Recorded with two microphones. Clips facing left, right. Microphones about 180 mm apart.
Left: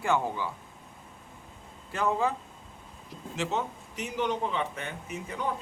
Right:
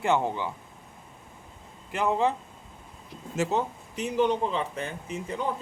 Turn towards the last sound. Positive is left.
turn(degrees=-30)  # may be behind; listen again after turning